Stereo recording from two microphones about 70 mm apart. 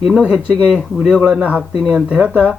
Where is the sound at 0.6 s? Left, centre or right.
Centre.